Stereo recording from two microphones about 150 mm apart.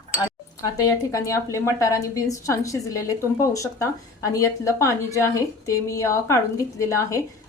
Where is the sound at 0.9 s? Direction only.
20° left (ahead or behind).